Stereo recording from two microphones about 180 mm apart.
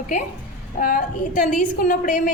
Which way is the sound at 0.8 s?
45° left (ahead or behind).